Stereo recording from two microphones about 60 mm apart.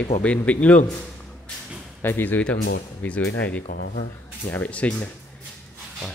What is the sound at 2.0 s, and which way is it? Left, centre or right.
Speech, left.